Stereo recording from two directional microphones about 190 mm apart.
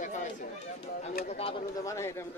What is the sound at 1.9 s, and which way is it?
Speech, 15° left (ahead or behind).